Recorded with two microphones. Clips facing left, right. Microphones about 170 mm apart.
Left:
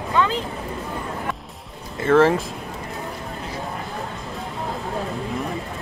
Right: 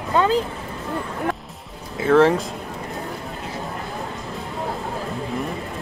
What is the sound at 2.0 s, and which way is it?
Speech, centre (ahead or behind).